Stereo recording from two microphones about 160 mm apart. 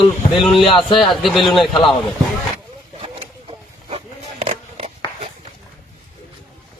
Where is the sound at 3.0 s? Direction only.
35° right (ahead or behind).